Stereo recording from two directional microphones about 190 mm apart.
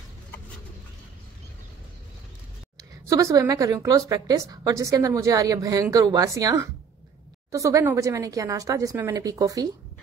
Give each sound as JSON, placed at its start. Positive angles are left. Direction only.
{"t": 2.8, "sound": "a woman's voice", "side_deg": -15}